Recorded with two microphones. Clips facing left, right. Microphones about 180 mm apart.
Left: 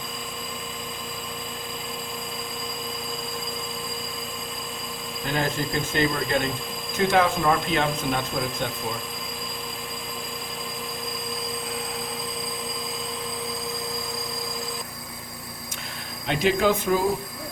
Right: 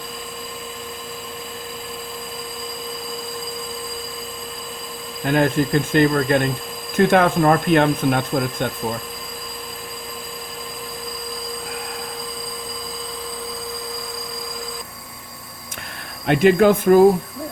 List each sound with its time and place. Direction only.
5.2 s speech: 55° right (ahead or behind)
16.2 s speech: 55° right (ahead or behind)